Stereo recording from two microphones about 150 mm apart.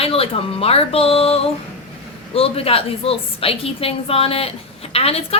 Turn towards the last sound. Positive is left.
turn(degrees=40)  # may be behind; listen again after turning